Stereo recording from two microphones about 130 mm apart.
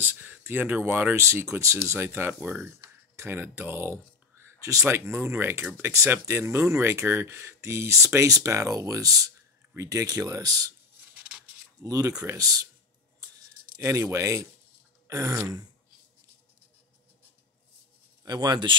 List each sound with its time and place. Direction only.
0.0 s speech: 15° right (ahead or behind); by 10.7 s 30° right (ahead or behind)
11.1 s filing: 10° right (ahead or behind)
11.8 s speech: 25° right (ahead or behind)
13.7 s speech: 20° right (ahead or behind)
18.2 s speech: 30° right (ahead or behind)